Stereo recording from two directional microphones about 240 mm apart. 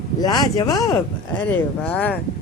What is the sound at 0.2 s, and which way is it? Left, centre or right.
Speech, centre.